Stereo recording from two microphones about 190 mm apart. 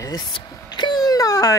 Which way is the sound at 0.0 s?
20° left (ahead or behind).